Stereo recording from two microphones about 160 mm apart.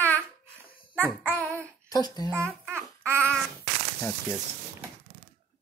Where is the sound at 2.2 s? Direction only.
15° right (ahead or behind).